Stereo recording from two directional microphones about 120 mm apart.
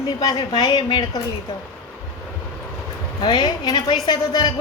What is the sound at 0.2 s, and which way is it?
A woman's voice, 35° left (ahead or behind).